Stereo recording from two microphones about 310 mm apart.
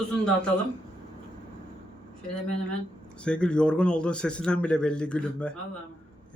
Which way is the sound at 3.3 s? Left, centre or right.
Centre.